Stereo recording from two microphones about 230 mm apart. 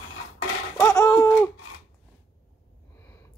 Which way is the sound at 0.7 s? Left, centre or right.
Centre.